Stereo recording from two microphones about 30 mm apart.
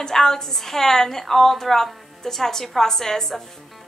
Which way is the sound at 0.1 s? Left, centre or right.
Centre.